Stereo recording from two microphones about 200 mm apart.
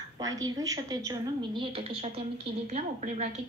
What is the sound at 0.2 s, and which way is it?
A woman's voice, 15° right (ahead or behind).